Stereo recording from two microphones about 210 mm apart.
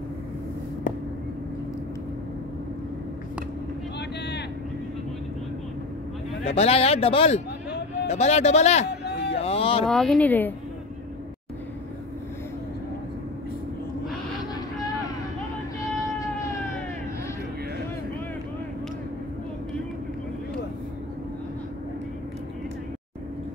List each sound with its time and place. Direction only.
6.4 s a man's voice: 30° left (ahead or behind)
8.8 s a sound: 50° left (ahead or behind)
9.4 s speech: 25° left (ahead or behind)
9.8 s speech: centre (ahead or behind)
15.8 s vehicle: 15° left (ahead or behind)